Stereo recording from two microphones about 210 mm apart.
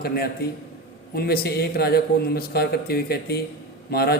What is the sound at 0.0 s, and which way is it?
Speech, 45° left (ahead or behind).